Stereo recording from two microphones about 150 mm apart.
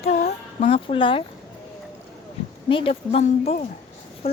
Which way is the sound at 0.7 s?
35° left (ahead or behind).